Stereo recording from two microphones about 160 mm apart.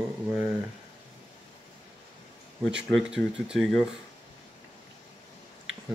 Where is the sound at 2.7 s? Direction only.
5° right (ahead or behind).